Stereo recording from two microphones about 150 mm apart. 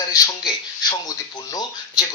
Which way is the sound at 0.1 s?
25° left (ahead or behind).